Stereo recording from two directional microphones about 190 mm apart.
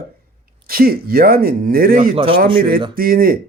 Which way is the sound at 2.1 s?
30° right (ahead or behind).